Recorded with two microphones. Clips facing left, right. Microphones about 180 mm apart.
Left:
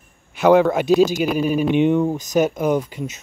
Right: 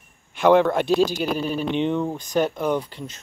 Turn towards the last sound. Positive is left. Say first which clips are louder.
# left 4 dB
turn(degrees=10)  # may be behind; listen again after turning